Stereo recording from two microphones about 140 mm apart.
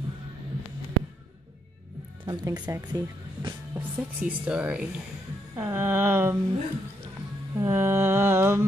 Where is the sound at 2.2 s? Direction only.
30° right (ahead or behind).